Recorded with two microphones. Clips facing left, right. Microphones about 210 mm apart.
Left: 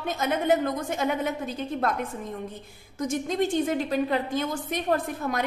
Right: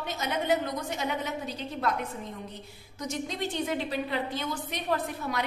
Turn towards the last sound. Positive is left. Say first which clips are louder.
# left 3 dB
turn(degrees=50)  # may be behind; listen again after turning